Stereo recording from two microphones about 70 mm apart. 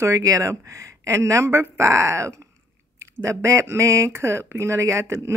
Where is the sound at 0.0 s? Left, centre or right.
Right.